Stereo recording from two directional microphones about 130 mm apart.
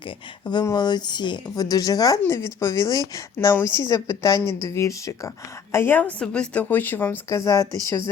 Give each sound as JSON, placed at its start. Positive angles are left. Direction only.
{"t": 0.4, "sound": "a woman's voice", "side_deg": 25}